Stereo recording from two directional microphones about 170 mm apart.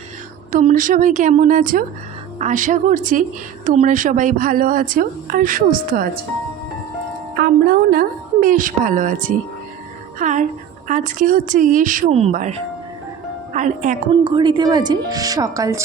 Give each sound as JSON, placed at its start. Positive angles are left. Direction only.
{"t": 0.5, "sound": "a woman's voice", "side_deg": -50}
{"t": 7.3, "sound": "a woman's voice", "side_deg": -65}
{"t": 14.3, "sound": "speech", "side_deg": -25}